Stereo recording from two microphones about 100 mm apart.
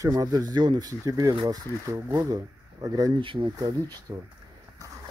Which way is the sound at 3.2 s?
55° right (ahead or behind).